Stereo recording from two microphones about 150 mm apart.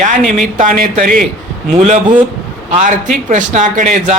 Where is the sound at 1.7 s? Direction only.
50° right (ahead or behind).